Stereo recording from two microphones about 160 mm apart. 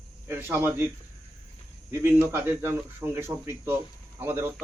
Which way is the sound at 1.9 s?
10° right (ahead or behind).